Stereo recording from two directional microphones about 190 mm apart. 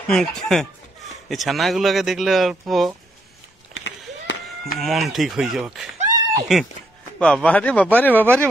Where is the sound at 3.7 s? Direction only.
75° left (ahead or behind).